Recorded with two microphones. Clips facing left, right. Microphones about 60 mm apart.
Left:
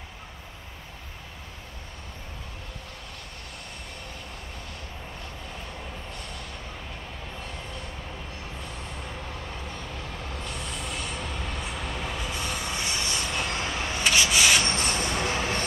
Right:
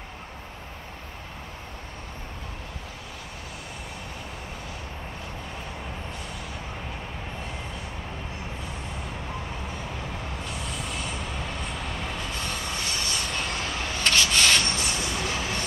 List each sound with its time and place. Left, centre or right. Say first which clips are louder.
10.4 s train: right 1 dB; centre
12.7 s rub: even; centre
14.8 s train: left 2 dB; left